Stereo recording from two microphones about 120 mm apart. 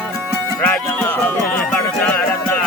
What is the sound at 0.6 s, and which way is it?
Music, 15° left (ahead or behind).